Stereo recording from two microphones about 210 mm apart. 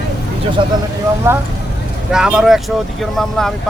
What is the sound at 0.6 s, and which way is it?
Speech, 25° right (ahead or behind).